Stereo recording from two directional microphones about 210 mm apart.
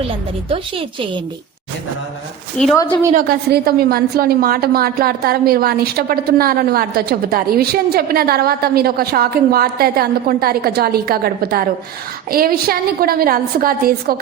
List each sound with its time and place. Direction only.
0.4 s a woman's voice: 25° right (ahead or behind)
3.1 s a woman's voice: 45° right (ahead or behind)